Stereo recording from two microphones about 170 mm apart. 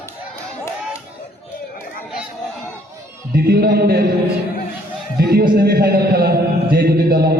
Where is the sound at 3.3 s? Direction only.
65° right (ahead or behind).